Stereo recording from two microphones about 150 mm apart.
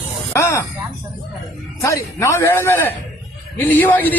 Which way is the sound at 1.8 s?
20° left (ahead or behind).